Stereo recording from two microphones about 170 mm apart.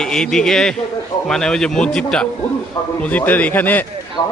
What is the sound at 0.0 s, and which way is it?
A man's voice, 5° left (ahead or behind).